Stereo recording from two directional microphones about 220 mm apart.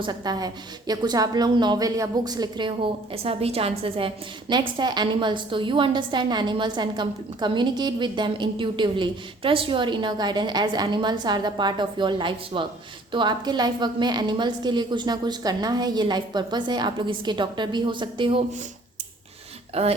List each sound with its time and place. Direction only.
0.0 s a woman's voice: 20° right (ahead or behind)
19.7 s a woman's voice: 25° right (ahead or behind)